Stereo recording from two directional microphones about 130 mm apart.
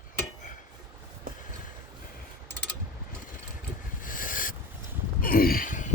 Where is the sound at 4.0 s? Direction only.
90° left.